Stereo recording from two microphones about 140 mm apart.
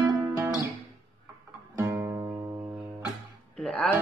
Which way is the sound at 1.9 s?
20° right (ahead or behind).